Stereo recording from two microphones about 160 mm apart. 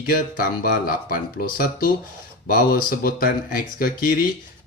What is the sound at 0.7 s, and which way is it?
Speech, 65° left (ahead or behind).